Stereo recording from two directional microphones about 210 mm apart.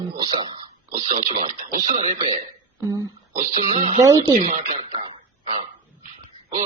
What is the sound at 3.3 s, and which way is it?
Speech, 30° right (ahead or behind).